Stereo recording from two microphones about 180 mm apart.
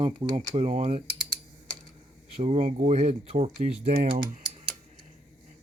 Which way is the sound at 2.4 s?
40° right (ahead or behind).